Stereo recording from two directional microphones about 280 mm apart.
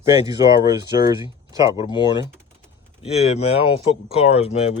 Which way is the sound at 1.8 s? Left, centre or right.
Centre.